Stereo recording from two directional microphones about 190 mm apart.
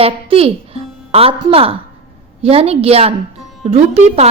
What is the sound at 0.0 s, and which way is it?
A woman's voice, 30° right (ahead or behind).